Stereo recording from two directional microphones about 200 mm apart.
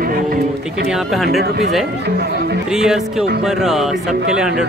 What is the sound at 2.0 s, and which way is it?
Speech, 55° right (ahead or behind).